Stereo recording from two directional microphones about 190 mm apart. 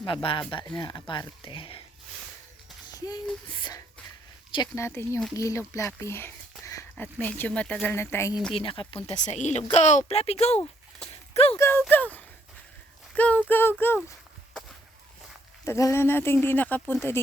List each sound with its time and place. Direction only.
0.0 s speech: 25° left (ahead or behind)
3.5 s speech: 20° left (ahead or behind)
8.5 s speech: 25° left (ahead or behind)
11.5 s speech: 15° left (ahead or behind)
15.6 s speech: 15° left (ahead or behind)